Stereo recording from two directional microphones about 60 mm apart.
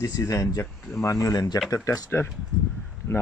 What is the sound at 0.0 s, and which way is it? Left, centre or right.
Speech, left.